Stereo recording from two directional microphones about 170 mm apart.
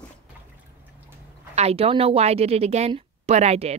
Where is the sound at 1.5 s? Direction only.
40° right (ahead or behind).